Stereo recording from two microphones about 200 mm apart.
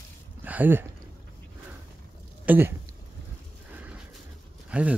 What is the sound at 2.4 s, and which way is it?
Speech, 10° right (ahead or behind).